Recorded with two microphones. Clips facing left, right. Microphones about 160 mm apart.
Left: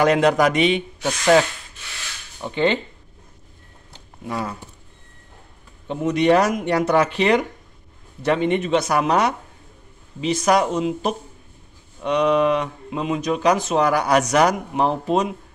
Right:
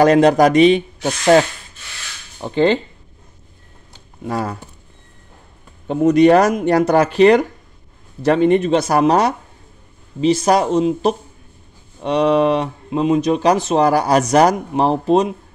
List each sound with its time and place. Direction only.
0.0 s speech: 35° right (ahead or behind)
2.4 s speech: 35° right (ahead or behind)
4.3 s speech: 40° right (ahead or behind)
5.9 s speech: 45° right (ahead or behind)